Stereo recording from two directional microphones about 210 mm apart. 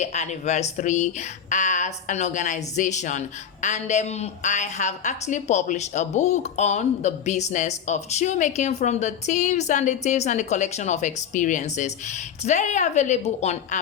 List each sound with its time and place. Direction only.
0.0 s speech: 35° left (ahead or behind)